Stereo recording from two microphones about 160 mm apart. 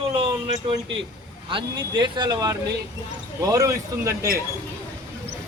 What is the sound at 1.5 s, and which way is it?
Speech, 30° right (ahead or behind).